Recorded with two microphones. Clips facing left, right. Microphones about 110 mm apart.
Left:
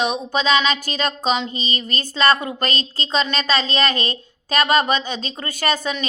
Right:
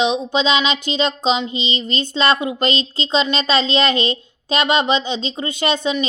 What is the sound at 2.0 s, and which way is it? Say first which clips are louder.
A woman's voice: even; 25° right (ahead or behind).